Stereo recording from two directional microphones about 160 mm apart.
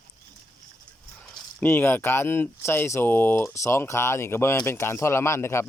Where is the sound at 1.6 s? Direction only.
15° left (ahead or behind).